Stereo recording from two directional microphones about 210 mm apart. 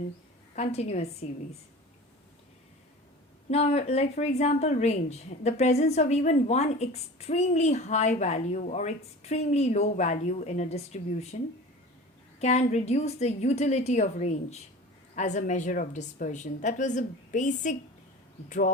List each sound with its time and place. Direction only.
0.5 s speech: 30° left (ahead or behind)
3.5 s speech: 30° left (ahead or behind)
12.4 s speech: 30° left (ahead or behind)